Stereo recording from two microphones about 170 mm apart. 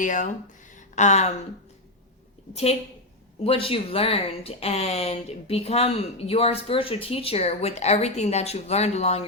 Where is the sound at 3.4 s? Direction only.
35° left (ahead or behind).